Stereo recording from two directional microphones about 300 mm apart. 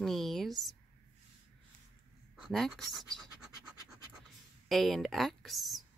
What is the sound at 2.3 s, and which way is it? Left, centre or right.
Writing, centre.